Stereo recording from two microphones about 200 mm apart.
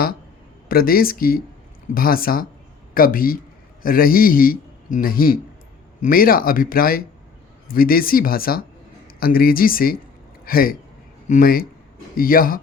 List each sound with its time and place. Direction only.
0.7 s a man's voice: 50° left (ahead or behind)